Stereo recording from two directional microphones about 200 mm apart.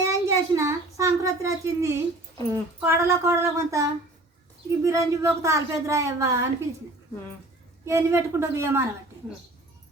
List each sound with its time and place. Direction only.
0.0 s a sound: 15° right (ahead or behind)
2.5 s speech: 10° right (ahead or behind)
7.9 s speech: 15° right (ahead or behind)